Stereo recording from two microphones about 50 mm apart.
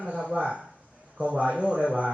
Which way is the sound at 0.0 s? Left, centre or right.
Centre.